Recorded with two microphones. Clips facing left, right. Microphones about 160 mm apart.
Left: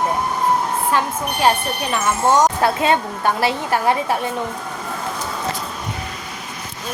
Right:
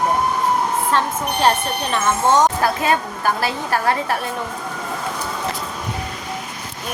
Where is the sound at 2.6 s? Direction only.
25° left (ahead or behind).